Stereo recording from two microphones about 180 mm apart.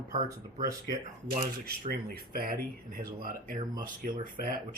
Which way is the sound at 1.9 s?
55° right (ahead or behind).